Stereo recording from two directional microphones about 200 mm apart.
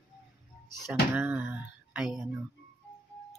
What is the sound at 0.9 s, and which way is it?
Speech, 5° right (ahead or behind).